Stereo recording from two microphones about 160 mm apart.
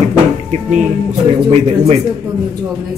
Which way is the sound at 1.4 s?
40° right (ahead or behind).